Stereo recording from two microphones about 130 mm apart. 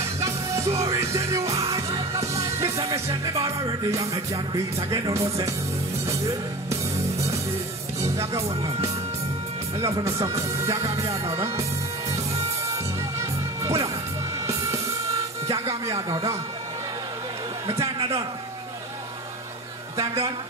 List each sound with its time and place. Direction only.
0.0 s music: 20° right (ahead or behind)
8.0 s speech: 25° right (ahead or behind)
9.8 s music: 25° right (ahead or behind)
12.6 s music: 25° right (ahead or behind)
15.4 s music: 25° right (ahead or behind)
17.6 s music: 25° right (ahead or behind)
20.0 s music: 25° right (ahead or behind)